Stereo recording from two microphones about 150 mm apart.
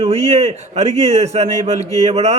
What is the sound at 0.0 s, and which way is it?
Speech, 45° right (ahead or behind).